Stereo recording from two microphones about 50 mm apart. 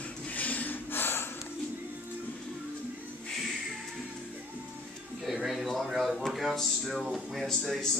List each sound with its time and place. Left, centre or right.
0.3 s snort: left
5.2 s a sound: centre
5.7 s speech: centre